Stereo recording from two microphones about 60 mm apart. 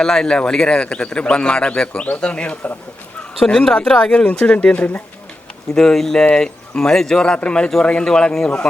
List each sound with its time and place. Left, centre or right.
0.0 s speech: centre; by 5.0 s left
5.7 s speech: centre